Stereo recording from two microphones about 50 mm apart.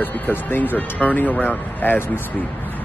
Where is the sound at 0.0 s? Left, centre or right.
Left.